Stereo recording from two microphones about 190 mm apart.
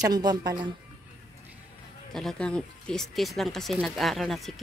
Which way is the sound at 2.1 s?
5° left (ahead or behind).